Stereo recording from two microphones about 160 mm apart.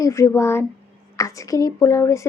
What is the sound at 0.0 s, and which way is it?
Speech, 20° left (ahead or behind).